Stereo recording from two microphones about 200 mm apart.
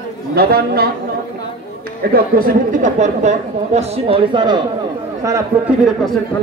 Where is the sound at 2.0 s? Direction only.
50° right (ahead or behind); by 4.6 s 25° right (ahead or behind).